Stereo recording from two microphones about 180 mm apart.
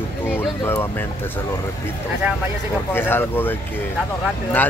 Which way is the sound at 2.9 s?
10° left (ahead or behind).